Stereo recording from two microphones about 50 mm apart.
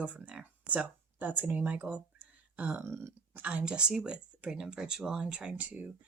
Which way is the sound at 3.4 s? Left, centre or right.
Right.